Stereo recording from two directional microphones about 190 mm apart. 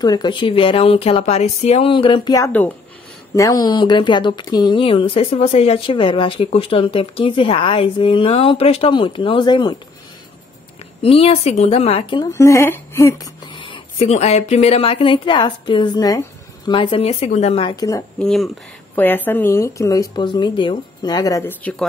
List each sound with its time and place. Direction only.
0.0 s speech: 20° left (ahead or behind)
11.0 s speech: 30° left (ahead or behind)
18.2 s speech: centre (ahead or behind)